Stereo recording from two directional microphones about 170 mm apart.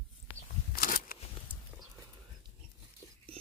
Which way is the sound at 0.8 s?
55° left (ahead or behind).